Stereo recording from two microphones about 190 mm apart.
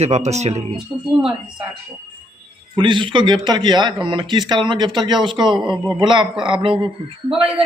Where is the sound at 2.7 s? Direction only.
25° right (ahead or behind).